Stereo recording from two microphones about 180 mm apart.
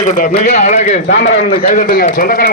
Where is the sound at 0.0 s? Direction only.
40° left (ahead or behind).